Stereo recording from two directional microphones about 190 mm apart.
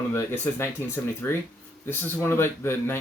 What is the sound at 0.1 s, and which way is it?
Speech, 15° left (ahead or behind).